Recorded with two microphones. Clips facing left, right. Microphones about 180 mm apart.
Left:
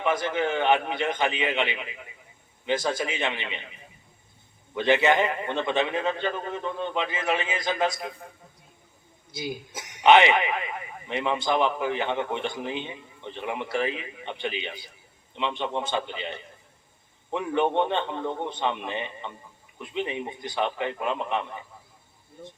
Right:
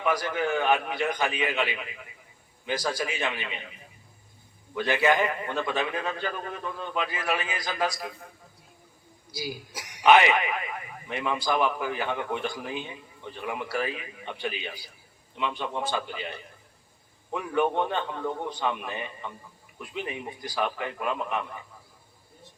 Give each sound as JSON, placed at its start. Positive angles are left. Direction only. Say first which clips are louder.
{"t": 0.0, "sound": "a man's voice", "louder": "left 2 dB", "side_deg": 25}
{"t": 4.7, "sound": "a man's voice", "louder": "left 3 dB", "side_deg": 25}
{"t": 9.3, "sound": "a man's voice", "louder": "left 2 dB", "side_deg": 25}